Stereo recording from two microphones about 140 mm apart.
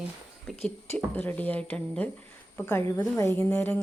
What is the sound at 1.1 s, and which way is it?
A woman's voice, 10° left (ahead or behind).